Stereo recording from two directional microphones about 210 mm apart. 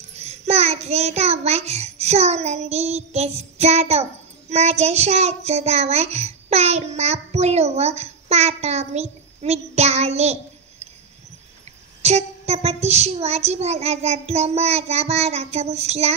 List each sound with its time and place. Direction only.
0.1 s child singing: 30° right (ahead or behind)
12.0 s a child's voice: 30° right (ahead or behind)